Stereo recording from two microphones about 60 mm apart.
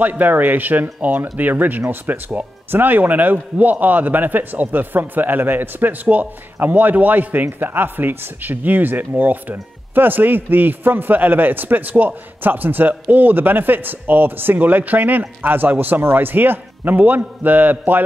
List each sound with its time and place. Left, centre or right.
0.0 s speech: right